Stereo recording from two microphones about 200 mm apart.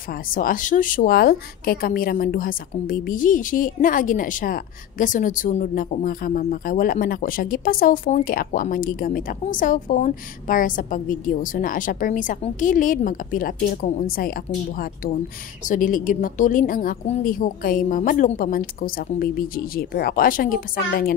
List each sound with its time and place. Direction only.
0.3 s a woman's voice: 45° left (ahead or behind)
15.7 s a woman's voice: 40° left (ahead or behind)